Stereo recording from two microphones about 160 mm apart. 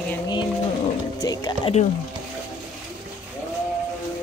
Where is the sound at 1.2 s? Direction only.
25° left (ahead or behind).